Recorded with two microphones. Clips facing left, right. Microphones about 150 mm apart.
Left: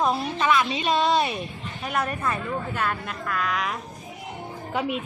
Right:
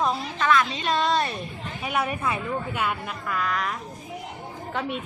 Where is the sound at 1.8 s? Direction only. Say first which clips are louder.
Even; 5° right (ahead or behind).